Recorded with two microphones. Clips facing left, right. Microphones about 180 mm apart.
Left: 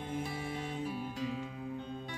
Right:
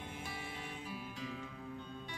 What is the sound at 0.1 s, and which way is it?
Music, 45° left (ahead or behind).